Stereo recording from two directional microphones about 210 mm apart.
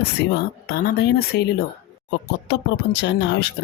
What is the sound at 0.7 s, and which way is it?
Speech, 50° left (ahead or behind).